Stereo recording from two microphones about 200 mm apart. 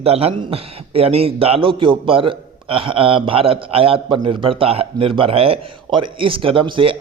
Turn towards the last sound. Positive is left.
turn(degrees=-25)  # may be behind; listen again after turning